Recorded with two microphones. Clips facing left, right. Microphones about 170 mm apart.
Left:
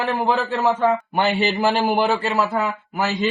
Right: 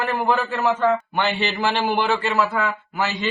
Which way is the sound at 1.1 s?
40° left (ahead or behind).